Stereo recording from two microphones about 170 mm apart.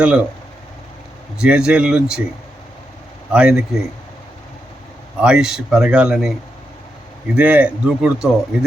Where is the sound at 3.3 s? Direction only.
5° right (ahead or behind).